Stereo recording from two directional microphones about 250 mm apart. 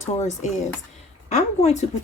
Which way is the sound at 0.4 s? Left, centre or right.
Left.